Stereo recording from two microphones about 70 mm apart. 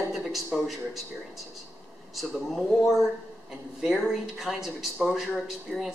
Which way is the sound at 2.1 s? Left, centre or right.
Centre.